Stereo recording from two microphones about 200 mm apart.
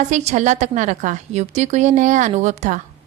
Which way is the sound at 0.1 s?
35° right (ahead or behind).